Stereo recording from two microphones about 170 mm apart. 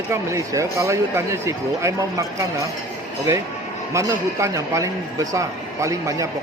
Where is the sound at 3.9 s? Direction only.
15° right (ahead or behind).